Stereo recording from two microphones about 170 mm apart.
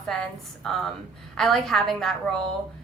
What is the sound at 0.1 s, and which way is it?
Speech, centre (ahead or behind).